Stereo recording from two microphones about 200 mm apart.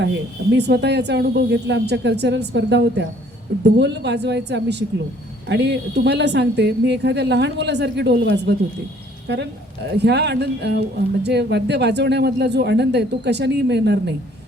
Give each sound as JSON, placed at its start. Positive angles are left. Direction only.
{"t": 0.5, "sound": "speech", "side_deg": -55}